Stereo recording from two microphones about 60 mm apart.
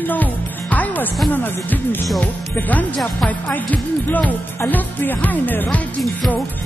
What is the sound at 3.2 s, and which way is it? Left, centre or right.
Speech, left.